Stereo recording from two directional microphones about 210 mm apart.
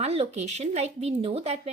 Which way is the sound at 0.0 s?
30° right (ahead or behind).